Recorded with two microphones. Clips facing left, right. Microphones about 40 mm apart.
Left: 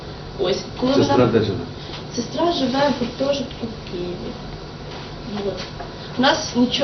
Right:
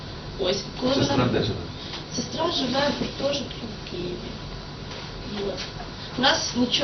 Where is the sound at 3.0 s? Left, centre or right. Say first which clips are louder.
Left 5 dB; centre.